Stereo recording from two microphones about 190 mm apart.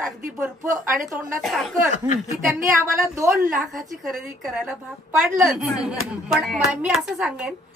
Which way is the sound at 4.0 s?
Centre (ahead or behind).